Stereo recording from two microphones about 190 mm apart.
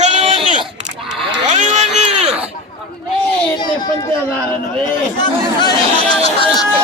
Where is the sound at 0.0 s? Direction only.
30° right (ahead or behind).